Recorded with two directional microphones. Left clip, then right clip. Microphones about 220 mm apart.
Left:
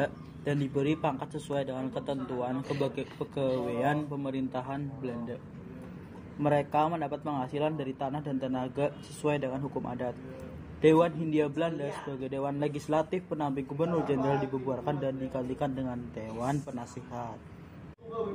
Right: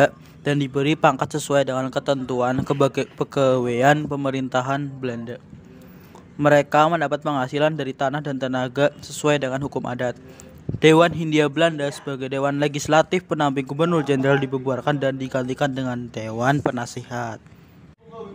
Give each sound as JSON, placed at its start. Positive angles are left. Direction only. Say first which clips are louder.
{"t": 0.0, "sound": "a man's voice", "louder": "right 14 dB", "side_deg": -50}
{"t": 6.4, "sound": "a man's voice", "louder": "right 11 dB", "side_deg": -55}